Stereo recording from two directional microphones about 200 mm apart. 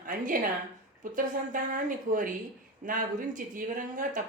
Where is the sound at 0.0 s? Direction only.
40° right (ahead or behind).